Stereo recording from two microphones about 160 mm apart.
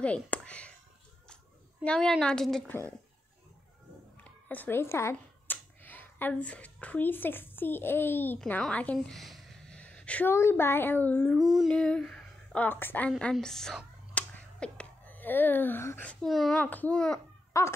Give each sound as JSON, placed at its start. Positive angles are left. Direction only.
{"t": 0.0, "sound": "a sound", "side_deg": 10}
{"t": 1.9, "sound": "a woman's voice", "side_deg": 5}
{"t": 4.2, "sound": "a woman's voice", "side_deg": 10}
{"t": 11.3, "sound": "speech", "side_deg": 0}
{"t": 16.5, "sound": "a child's voice", "side_deg": 10}
{"t": 17.5, "sound": "a sound", "side_deg": 15}